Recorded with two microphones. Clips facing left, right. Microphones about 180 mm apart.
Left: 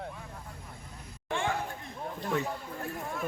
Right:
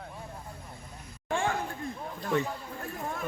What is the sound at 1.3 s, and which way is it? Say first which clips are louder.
Chatter: right 2 dB; 45° right (ahead or behind).